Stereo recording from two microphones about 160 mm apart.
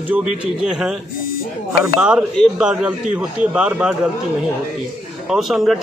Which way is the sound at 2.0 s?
5° right (ahead or behind).